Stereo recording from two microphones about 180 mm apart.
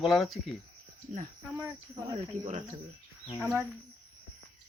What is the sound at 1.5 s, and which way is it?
Speech, 15° right (ahead or behind).